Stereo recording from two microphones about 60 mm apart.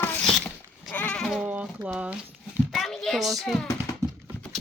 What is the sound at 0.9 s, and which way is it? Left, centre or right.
Goat, left.